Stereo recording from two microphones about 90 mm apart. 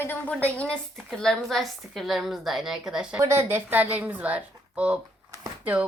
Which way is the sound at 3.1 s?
30° right (ahead or behind).